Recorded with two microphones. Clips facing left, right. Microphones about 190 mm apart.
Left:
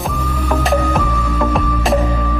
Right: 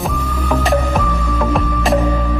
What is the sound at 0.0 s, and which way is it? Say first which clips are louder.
Music: even; centre (ahead or behind).